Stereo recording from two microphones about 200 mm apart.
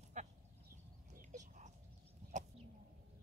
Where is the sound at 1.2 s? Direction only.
40° right (ahead or behind).